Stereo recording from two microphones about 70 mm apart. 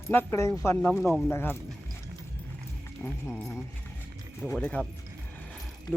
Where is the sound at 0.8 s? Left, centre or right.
Centre.